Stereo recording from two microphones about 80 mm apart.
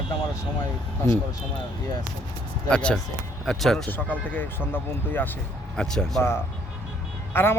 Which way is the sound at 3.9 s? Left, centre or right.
Left.